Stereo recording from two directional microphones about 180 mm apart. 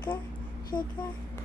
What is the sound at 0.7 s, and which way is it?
Speech, 25° left (ahead or behind).